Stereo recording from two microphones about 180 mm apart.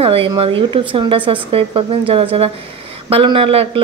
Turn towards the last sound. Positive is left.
turn(degrees=-30)  # may be behind; listen again after turning